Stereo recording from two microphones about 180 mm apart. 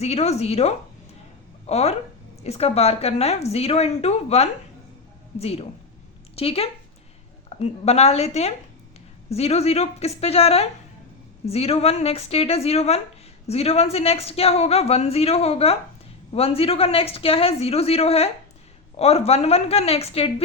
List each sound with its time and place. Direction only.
0.0 s a woman's voice: 35° left (ahead or behind)